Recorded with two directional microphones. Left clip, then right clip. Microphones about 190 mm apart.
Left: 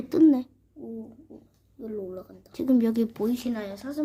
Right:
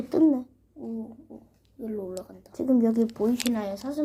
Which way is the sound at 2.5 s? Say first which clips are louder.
Right 1 dB; 50° left (ahead or behind).